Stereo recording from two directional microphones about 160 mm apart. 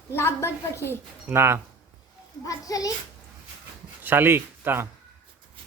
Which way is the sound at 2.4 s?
20° left (ahead or behind).